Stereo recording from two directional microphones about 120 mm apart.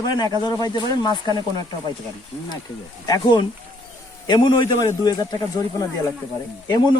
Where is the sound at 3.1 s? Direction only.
40° left (ahead or behind).